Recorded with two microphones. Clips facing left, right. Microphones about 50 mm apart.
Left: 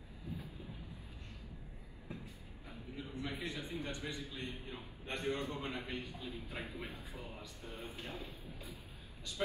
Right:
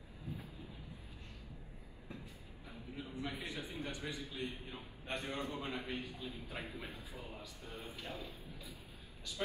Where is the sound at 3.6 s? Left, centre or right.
Left.